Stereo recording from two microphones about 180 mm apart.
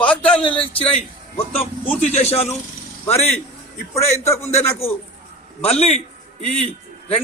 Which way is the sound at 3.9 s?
15° left (ahead or behind).